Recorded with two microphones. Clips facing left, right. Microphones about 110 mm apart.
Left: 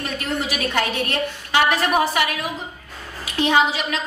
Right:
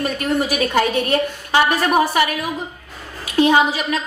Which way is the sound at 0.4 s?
45° right (ahead or behind).